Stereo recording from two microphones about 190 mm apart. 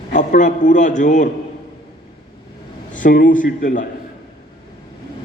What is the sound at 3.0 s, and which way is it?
Speech, 45° left (ahead or behind).